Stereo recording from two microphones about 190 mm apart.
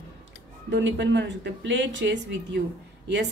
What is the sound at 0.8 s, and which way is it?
Speech, 70° right (ahead or behind).